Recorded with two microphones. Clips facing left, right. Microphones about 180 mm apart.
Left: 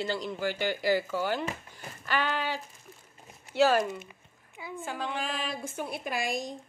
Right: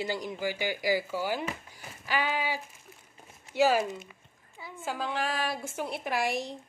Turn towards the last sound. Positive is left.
turn(degrees=-70)  # may be behind; listen again after turning